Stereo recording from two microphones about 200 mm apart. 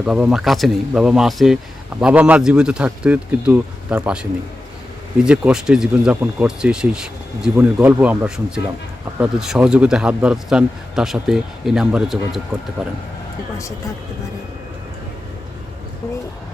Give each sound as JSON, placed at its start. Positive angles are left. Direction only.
{"t": 0.0, "sound": "speech", "side_deg": -5}